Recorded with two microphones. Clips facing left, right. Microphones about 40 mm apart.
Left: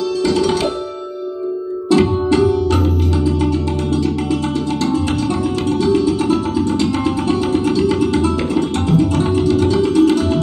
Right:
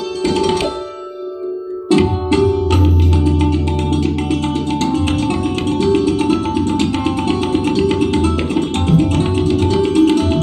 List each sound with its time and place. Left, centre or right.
0.2 s tabla: right
1.9 s music: right
3.9 s music: right